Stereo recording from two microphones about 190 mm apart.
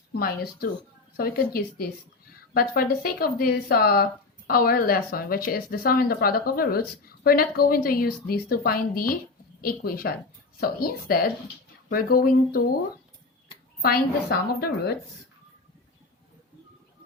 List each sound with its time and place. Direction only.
0.1 s speech: 50° left (ahead or behind)
2.7 s speech: 50° left (ahead or behind)
13.8 s a woman's voice: 55° left (ahead or behind)